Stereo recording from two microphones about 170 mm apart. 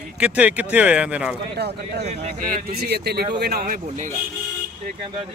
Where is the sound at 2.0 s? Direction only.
40° right (ahead or behind).